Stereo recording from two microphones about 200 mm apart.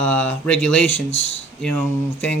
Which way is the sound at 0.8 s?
70° left (ahead or behind).